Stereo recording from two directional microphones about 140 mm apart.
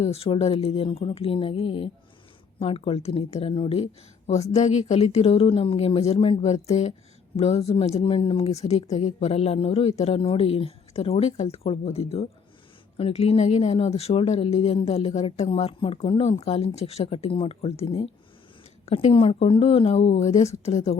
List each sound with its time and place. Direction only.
0.0 s speech: 45° left (ahead or behind)
4.5 s speech: 55° left (ahead or behind)